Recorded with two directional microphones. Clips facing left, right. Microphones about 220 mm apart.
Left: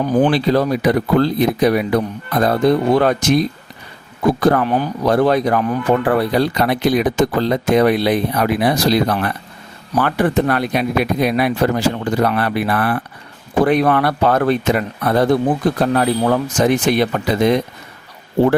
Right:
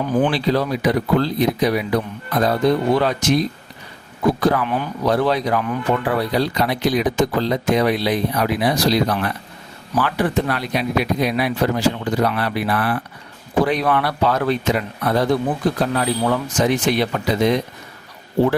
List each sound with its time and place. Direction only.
0.1 s speech: 35° left (ahead or behind)
0.3 s speech: 50° left (ahead or behind)
4.4 s speech: 50° left (ahead or behind)